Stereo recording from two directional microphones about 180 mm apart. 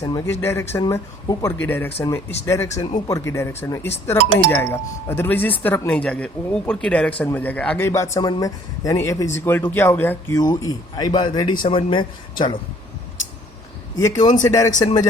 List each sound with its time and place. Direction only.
0.0 s speech: 15° left (ahead or behind)
2.6 s speech: 40° left (ahead or behind)
3.1 s speech: 15° left (ahead or behind)
14.0 s speech: 20° left (ahead or behind)